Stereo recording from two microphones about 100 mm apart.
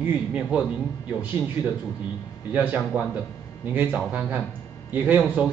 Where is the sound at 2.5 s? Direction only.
15° right (ahead or behind).